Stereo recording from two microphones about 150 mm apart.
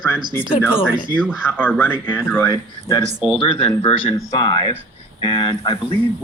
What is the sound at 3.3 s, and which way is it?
Speech, 35° left (ahead or behind).